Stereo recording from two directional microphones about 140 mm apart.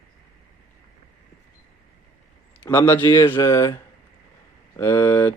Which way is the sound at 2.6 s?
15° left (ahead or behind).